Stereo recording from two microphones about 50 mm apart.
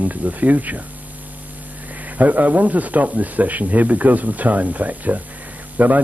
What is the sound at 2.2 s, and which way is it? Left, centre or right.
Speech, right.